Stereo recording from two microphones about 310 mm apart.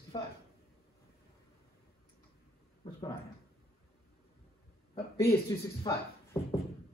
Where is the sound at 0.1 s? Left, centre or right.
Centre.